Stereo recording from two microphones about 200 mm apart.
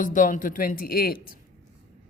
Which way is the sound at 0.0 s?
40° left (ahead or behind).